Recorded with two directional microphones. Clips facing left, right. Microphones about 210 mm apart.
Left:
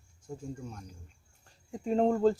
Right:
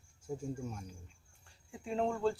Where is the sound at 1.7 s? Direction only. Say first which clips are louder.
Left 8 dB; 40° left (ahead or behind).